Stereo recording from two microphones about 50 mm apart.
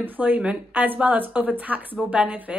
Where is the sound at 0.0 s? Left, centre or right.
Right.